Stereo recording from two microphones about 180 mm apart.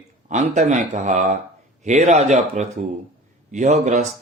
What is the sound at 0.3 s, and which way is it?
Speech, 40° right (ahead or behind).